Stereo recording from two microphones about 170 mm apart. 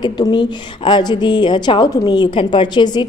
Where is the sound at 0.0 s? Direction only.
25° left (ahead or behind).